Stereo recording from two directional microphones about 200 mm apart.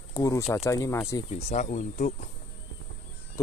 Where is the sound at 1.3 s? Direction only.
35° left (ahead or behind).